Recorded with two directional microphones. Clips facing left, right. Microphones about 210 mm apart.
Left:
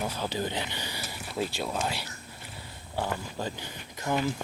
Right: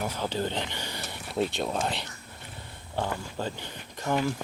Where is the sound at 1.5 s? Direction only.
25° right (ahead or behind).